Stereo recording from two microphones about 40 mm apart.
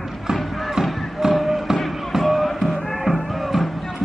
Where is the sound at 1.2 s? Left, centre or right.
Centre.